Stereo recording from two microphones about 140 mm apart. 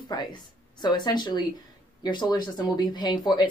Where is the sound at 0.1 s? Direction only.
30° left (ahead or behind).